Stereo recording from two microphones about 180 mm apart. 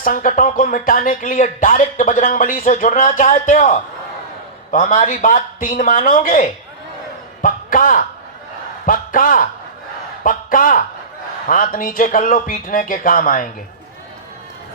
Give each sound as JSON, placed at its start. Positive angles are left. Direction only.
{"t": 0.0, "sound": "a man's voice", "side_deg": 50}